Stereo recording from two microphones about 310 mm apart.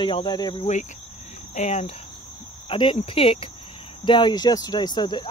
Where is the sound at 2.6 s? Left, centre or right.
Centre.